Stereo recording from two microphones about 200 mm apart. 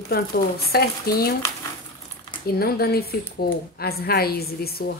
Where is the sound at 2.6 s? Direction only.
50° left (ahead or behind).